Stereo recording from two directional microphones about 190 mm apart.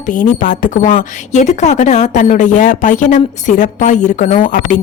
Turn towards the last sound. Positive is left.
turn(degrees=45)  # may be behind; listen again after turning